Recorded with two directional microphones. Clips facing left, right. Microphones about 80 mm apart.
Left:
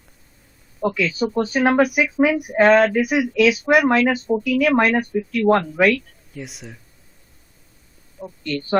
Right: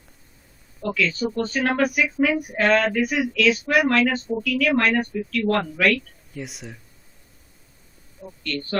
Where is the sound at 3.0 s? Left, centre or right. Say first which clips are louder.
Left 4 dB; centre.